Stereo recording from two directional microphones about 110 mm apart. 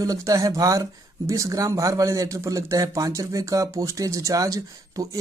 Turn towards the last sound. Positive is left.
turn(degrees=-30)  # may be behind; listen again after turning